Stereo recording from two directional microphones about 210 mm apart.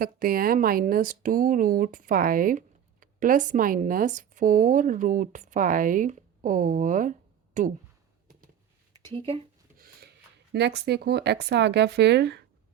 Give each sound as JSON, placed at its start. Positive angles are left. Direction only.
{"t": 0.0, "sound": "speech", "side_deg": -45}
{"t": 9.1, "sound": "speech", "side_deg": -25}
{"t": 9.7, "sound": "a sound", "side_deg": -45}
{"t": 10.5, "sound": "speech", "side_deg": -50}